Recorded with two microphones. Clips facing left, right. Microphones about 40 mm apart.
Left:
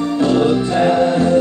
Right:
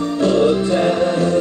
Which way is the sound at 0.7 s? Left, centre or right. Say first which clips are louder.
Left 2 dB; left.